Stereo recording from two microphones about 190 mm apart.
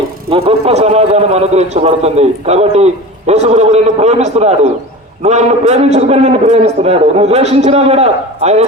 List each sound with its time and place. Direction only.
0.3 s a man's voice: 30° right (ahead or behind)